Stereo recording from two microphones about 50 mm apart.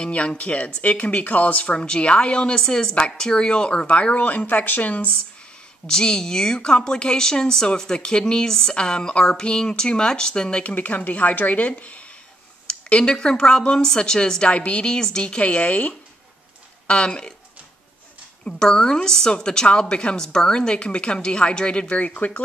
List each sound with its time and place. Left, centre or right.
0.0 s speech: left
5.9 s a woman's voice: centre
10.6 s speech: left
12.6 s a woman's voice: centre
18.4 s a woman's voice: centre
22.0 s speech: left